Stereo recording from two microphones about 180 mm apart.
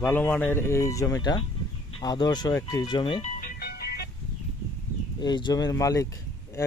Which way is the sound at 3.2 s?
50° left (ahead or behind).